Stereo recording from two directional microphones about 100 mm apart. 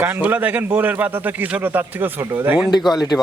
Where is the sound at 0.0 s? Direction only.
20° right (ahead or behind).